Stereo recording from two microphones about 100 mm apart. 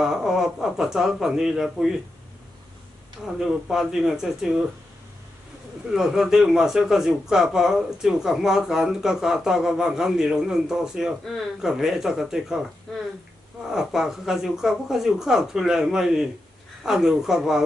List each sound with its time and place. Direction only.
0.0 s speech: 5° right (ahead or behind)
3.3 s speech: 5° right (ahead or behind)
5.9 s speech: 5° right (ahead or behind)
13.7 s speech: 5° right (ahead or behind)